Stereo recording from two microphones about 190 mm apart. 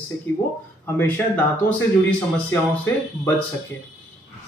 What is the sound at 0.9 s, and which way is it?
Speech, 10° left (ahead or behind).